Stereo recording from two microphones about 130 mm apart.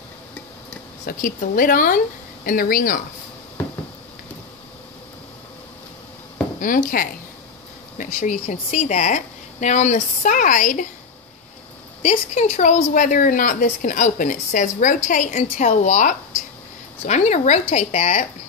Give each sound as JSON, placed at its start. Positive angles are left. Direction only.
{"t": 1.2, "sound": "speech", "side_deg": 90}
{"t": 6.6, "sound": "speech", "side_deg": 90}
{"t": 8.0, "sound": "a woman's voice", "side_deg": 80}
{"t": 12.0, "sound": "a woman's voice", "side_deg": 65}